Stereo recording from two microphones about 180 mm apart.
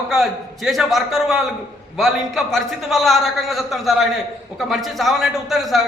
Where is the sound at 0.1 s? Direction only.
Centre (ahead or behind).